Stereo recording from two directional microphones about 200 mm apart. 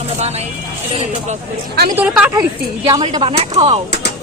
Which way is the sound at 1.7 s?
50° right (ahead or behind).